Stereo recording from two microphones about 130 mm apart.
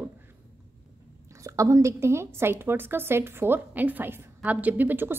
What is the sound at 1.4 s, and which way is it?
A woman's voice, 25° right (ahead or behind).